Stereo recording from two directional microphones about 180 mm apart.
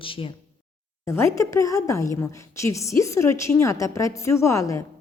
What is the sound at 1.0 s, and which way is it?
A woman's voice, 15° left (ahead or behind).